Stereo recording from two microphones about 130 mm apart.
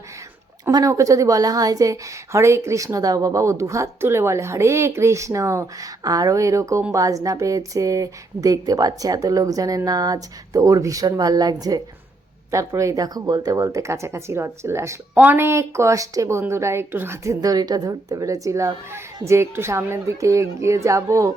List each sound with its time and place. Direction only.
0.6 s a woman's voice: 30° right (ahead or behind)